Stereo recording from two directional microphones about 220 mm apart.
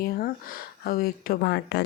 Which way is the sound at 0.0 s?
40° left (ahead or behind).